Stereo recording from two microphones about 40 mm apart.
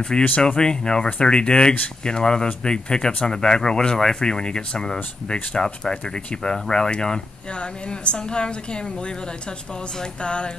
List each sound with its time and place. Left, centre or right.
0.4 s speech: left
10.2 s speech: left